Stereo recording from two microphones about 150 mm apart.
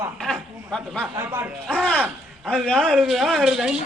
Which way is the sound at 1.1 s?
15° right (ahead or behind).